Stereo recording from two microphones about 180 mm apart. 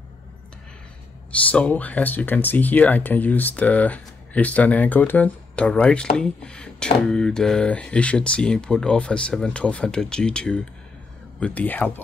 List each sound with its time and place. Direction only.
1.3 s speech: 5° left (ahead or behind)